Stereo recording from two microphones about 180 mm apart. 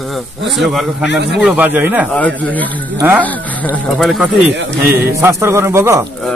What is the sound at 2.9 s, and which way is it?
A man's voice, 10° right (ahead or behind).